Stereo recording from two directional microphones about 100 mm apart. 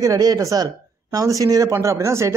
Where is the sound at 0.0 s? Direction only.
35° right (ahead or behind).